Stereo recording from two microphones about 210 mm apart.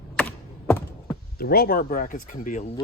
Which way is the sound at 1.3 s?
45° left (ahead or behind).